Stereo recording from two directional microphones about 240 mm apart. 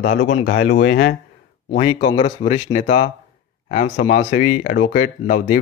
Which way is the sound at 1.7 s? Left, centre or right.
Left.